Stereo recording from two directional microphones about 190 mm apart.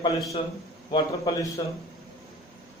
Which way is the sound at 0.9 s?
20° left (ahead or behind).